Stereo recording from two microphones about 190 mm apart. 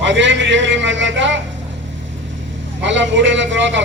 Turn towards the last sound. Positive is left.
turn(degrees=-75)  # may be behind; listen again after turning